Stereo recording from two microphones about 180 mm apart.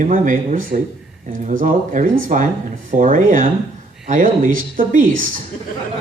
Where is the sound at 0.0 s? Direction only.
45° right (ahead or behind).